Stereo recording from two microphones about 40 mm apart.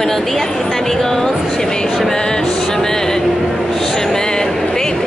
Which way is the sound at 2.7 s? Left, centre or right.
Centre.